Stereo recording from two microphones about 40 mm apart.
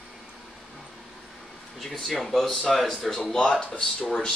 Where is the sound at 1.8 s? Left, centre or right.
Centre.